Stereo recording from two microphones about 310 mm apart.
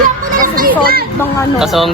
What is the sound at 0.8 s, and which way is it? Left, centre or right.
Speech, right.